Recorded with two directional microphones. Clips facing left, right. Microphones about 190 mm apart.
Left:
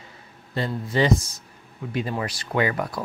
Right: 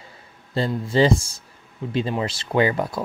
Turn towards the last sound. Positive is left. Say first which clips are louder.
# right 4 dB
turn(degrees=-25)  # may be behind; listen again after turning